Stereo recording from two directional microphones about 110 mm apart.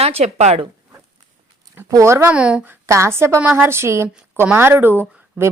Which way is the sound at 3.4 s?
10° right (ahead or behind).